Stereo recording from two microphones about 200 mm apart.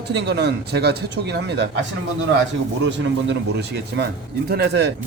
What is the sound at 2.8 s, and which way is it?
Speech, 60° right (ahead or behind).